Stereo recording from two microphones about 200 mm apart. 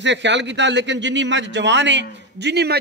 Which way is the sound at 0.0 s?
60° right (ahead or behind).